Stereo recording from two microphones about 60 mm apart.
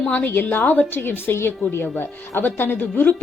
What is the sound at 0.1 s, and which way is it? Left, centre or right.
A woman's voice, left.